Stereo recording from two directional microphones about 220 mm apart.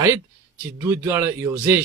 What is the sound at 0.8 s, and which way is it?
Speech, 10° right (ahead or behind).